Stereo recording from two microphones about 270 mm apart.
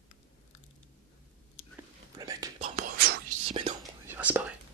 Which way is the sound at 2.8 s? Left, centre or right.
Right.